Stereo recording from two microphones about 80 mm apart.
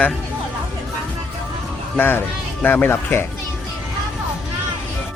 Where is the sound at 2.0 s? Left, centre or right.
Left.